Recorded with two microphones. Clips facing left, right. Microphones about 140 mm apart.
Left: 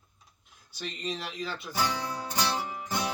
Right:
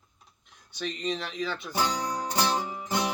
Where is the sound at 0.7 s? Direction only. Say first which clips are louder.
Right 4 dB; 5° left (ahead or behind).